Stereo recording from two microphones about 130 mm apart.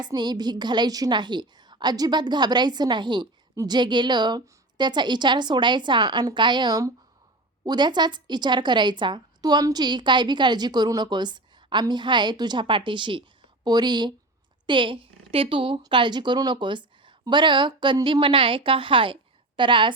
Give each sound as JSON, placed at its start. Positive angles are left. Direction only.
{"t": 0.0, "sound": "a woman's voice", "side_deg": -35}